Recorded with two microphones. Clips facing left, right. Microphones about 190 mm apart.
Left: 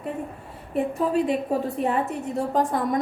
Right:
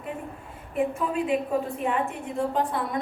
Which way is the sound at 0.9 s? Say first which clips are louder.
Left 3 dB; 40° left (ahead or behind).